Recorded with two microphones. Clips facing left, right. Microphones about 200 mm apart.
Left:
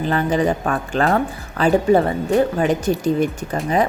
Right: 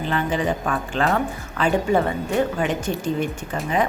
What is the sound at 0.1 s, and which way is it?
A woman's voice, 40° left (ahead or behind).